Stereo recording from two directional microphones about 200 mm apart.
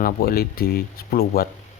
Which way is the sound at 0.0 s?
50° left (ahead or behind).